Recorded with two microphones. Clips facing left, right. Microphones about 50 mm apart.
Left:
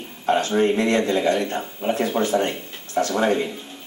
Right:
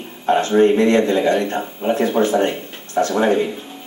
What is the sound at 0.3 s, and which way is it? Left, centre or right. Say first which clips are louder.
A man's voice: right 5 dB; right.